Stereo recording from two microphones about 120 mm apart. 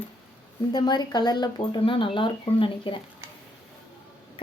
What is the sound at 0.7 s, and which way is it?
Speech, 35° left (ahead or behind).